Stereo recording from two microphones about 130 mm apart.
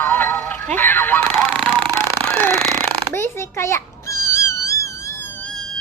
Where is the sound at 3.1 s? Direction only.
20° left (ahead or behind).